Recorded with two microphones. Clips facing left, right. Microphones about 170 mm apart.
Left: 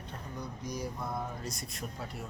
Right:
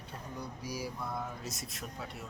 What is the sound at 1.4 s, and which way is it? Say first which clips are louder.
Speech: left 2 dB; centre (ahead or behind).